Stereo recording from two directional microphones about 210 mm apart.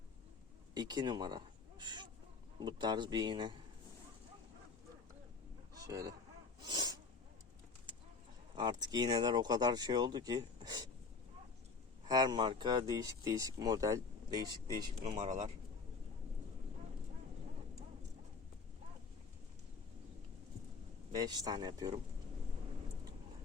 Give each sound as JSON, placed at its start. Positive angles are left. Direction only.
{"t": 0.7, "sound": "speech", "side_deg": -20}
{"t": 5.7, "sound": "a sound", "side_deg": -15}
{"t": 8.5, "sound": "speech", "side_deg": -20}
{"t": 12.0, "sound": "speech", "side_deg": -20}
{"t": 15.2, "sound": "speech", "side_deg": -35}
{"t": 21.1, "sound": "speech", "side_deg": -20}